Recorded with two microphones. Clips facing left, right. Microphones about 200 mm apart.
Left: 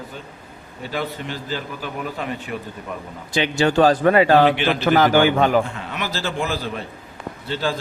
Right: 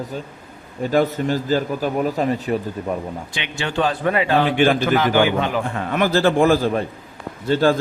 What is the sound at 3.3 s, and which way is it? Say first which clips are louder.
Speech: left 7 dB; 40° left (ahead or behind).